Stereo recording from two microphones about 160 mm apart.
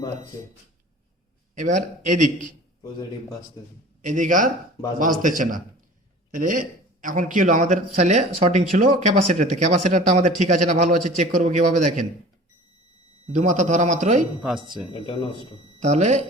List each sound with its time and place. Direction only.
1.5 s speech: 50° right (ahead or behind)
4.0 s a man's voice: 50° right (ahead or behind)
13.2 s speech: 50° right (ahead or behind)
15.0 s speech: 35° left (ahead or behind)
15.8 s speech: 45° right (ahead or behind)